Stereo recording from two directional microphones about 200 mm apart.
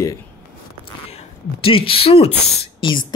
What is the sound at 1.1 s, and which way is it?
Speech, 30° left (ahead or behind).